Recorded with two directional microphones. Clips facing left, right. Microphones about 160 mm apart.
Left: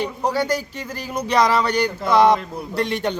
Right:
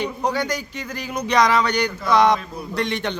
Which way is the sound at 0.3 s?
30° left (ahead or behind).